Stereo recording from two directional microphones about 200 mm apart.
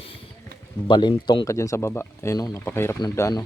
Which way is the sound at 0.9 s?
20° left (ahead or behind).